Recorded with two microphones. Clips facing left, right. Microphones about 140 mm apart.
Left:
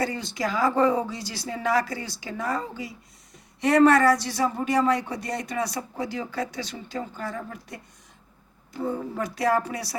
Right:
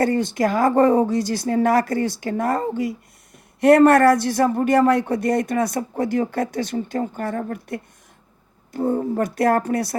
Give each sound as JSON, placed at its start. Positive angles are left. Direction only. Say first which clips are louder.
{"t": 0.0, "sound": "a man's voice", "louder": "right 9 dB", "side_deg": -50}
{"t": 8.7, "sound": "a man's voice", "louder": "right 8 dB", "side_deg": -45}